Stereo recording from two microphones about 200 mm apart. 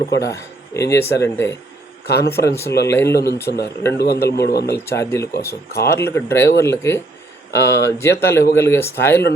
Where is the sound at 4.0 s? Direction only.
55° left (ahead or behind).